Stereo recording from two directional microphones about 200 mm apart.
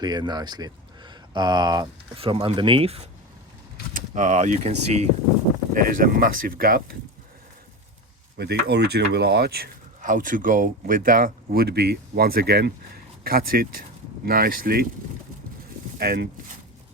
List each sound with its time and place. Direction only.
0.0 s speech: 20° right (ahead or behind); by 6.9 s 50° right (ahead or behind)
8.4 s speech: 55° right (ahead or behind)
16.0 s speech: 50° right (ahead or behind)